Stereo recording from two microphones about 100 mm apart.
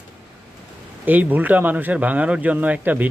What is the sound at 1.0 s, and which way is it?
Speech, 15° right (ahead or behind).